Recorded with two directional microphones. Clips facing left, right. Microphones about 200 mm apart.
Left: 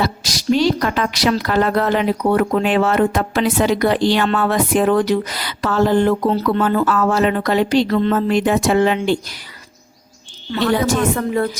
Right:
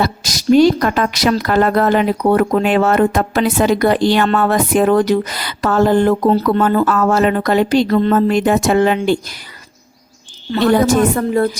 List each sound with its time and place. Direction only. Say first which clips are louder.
0.5 s a woman's voice: right 6 dB; 50° right (ahead or behind)
10.5 s a woman's voice: right 5 dB; 45° right (ahead or behind)